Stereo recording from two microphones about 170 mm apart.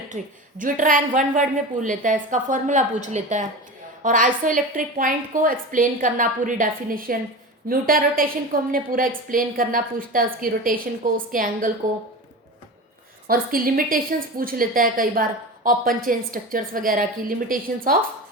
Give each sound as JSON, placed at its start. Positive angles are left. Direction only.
{"t": 0.1, "sound": "a woman's voice", "side_deg": -45}
{"t": 13.2, "sound": "a woman's voice", "side_deg": -55}